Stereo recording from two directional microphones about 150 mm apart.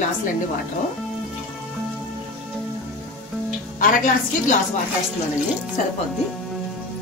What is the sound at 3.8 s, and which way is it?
Speech, 65° left (ahead or behind).